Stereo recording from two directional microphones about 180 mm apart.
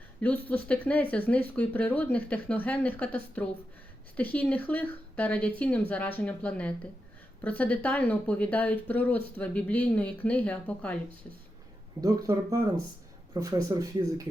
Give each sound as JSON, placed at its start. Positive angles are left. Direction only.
{"t": 0.2, "sound": "speech", "side_deg": 10}
{"t": 12.0, "sound": "speech", "side_deg": -20}